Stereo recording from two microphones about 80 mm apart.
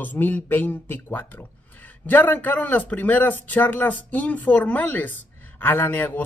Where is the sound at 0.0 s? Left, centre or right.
Left.